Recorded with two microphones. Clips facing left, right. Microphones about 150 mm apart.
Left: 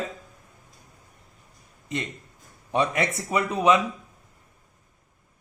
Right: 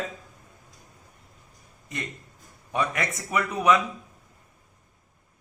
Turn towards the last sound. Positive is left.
turn(degrees=25)  # may be behind; listen again after turning